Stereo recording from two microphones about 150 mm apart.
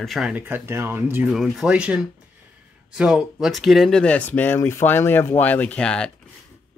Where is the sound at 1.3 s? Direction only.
Centre (ahead or behind).